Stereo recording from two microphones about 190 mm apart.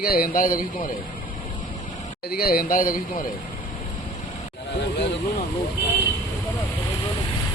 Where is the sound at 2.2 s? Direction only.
50° left (ahead or behind).